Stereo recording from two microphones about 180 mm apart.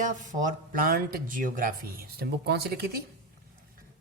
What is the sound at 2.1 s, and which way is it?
Speech, 65° right (ahead or behind).